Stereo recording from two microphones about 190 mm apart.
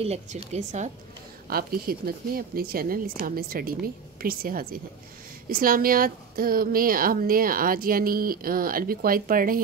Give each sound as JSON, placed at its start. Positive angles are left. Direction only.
{"t": 0.0, "sound": "a woman's voice", "side_deg": -35}
{"t": 1.5, "sound": "a woman's voice", "side_deg": -50}